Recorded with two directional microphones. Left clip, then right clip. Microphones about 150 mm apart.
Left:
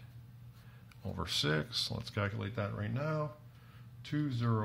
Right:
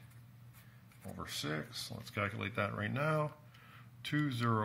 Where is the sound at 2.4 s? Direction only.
10° right (ahead or behind).